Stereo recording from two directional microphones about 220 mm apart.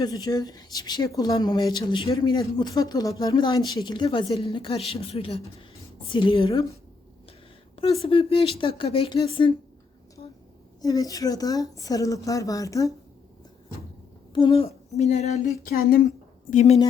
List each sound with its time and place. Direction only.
0.0 s a woman's voice: 20° left (ahead or behind)
8.0 s a woman's voice: 25° left (ahead or behind)
10.8 s speech: 15° left (ahead or behind)
14.3 s a woman's voice: 25° left (ahead or behind)
15.6 s speech: 40° left (ahead or behind)
16.5 s a woman's voice: 30° left (ahead or behind)